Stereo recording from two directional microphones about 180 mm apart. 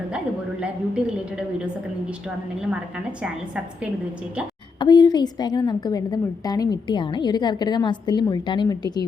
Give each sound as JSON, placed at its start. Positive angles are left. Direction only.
{"t": 0.6, "sound": "a woman's voice", "side_deg": -5}
{"t": 4.8, "sound": "a woman's voice", "side_deg": 25}